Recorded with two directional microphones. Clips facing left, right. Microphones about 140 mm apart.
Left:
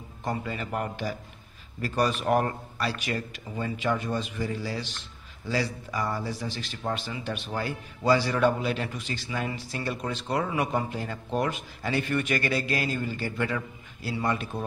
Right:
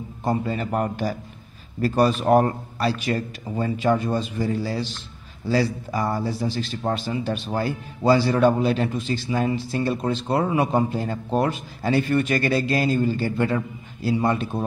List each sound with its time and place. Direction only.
0.2 s a man's voice: 35° right (ahead or behind)